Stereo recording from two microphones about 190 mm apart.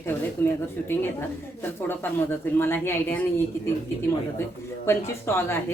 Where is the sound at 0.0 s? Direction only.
10° left (ahead or behind).